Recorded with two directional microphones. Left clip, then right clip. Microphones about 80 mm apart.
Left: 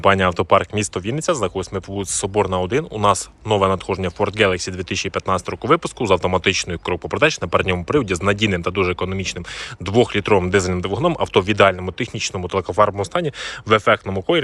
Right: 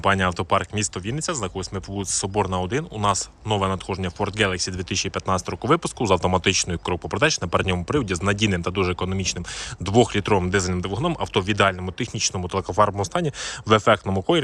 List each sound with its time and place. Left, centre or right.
0.0 s speech: centre; by 14.4 s right